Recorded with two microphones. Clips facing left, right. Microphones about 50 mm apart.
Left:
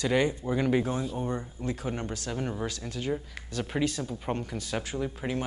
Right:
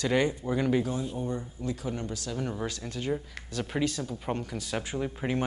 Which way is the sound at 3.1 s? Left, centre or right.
Centre.